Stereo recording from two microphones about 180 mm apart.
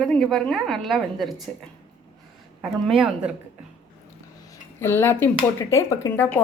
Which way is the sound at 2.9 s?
Centre (ahead or behind).